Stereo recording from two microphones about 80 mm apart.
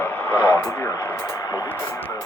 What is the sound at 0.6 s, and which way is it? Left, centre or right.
Speech, left.